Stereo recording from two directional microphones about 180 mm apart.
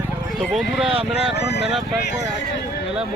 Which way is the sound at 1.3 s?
65° left (ahead or behind).